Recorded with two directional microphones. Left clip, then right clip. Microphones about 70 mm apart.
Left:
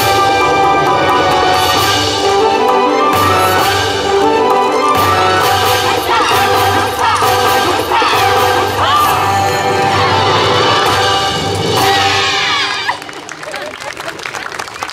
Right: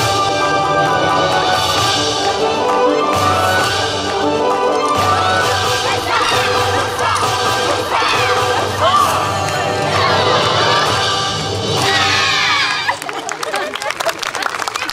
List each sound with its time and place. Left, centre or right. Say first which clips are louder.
0.0 s music: left 4 dB; left
3.2 s music: left 3 dB; left
6.1 s crowd: left 3 dB; centre
7.2 s music: left 4 dB; left
10.4 s smash: left 3 dB; left
11.8 s music: left 2 dB; centre